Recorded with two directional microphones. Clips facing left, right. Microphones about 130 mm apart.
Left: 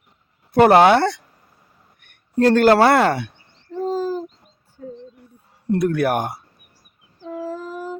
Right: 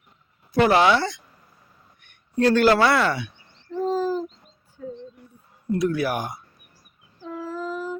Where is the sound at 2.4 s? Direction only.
50° left (ahead or behind).